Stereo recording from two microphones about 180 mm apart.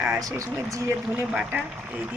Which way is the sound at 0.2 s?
20° right (ahead or behind).